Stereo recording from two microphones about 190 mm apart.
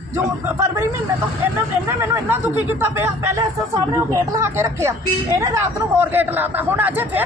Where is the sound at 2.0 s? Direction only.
15° right (ahead or behind).